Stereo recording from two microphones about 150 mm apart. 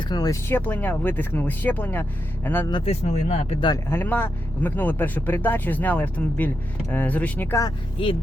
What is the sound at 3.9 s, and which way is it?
Speech, 15° left (ahead or behind).